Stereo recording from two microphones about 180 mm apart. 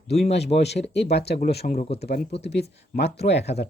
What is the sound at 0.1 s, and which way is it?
Speech, 35° left (ahead or behind).